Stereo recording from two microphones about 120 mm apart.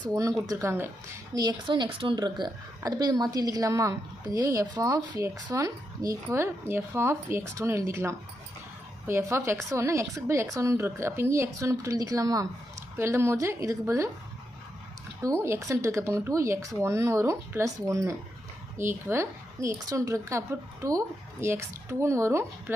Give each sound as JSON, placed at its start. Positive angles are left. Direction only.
{"t": 0.1, "sound": "a woman's voice", "side_deg": -25}
{"t": 1.4, "sound": "a woman's voice", "side_deg": -35}
{"t": 15.4, "sound": "a woman's voice", "side_deg": -25}